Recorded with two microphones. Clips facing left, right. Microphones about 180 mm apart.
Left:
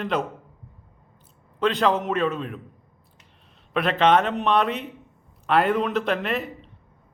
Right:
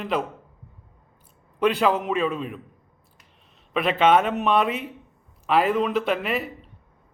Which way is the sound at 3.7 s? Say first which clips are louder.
Even; centre (ahead or behind).